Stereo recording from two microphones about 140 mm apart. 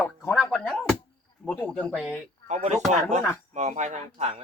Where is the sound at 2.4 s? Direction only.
55° right (ahead or behind).